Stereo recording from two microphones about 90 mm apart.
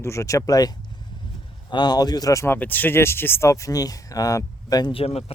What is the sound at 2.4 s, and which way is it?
Speech, 25° left (ahead or behind).